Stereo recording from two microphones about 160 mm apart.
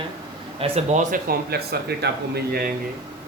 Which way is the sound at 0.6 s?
45° right (ahead or behind).